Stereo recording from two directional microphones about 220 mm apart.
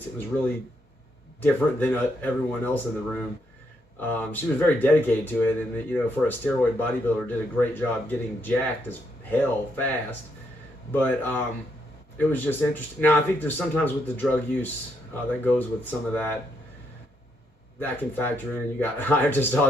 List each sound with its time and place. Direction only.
1.4 s speech: 10° left (ahead or behind)
17.7 s speech: 10° left (ahead or behind)